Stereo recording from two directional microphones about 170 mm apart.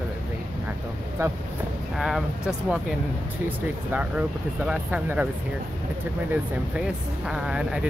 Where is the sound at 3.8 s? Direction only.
10° right (ahead or behind).